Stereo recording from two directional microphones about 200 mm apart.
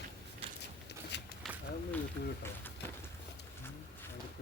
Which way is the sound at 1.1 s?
60° left (ahead or behind).